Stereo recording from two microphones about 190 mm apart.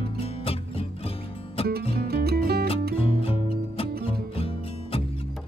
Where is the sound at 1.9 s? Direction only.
55° right (ahead or behind).